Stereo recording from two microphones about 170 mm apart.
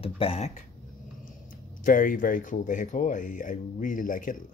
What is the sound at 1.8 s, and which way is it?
Speech, 50° left (ahead or behind).